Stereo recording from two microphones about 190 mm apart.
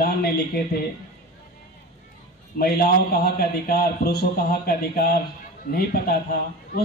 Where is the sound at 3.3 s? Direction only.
55° left (ahead or behind).